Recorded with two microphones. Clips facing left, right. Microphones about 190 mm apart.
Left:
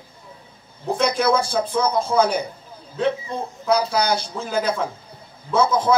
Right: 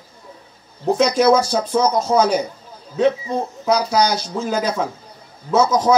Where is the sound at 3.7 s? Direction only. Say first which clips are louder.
Right 2 dB; 55° left (ahead or behind).